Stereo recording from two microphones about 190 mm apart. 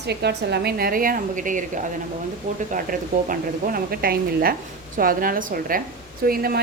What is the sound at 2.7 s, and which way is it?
A woman's voice, 45° right (ahead or behind).